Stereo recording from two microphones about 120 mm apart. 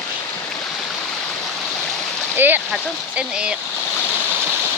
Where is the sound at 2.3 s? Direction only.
15° right (ahead or behind).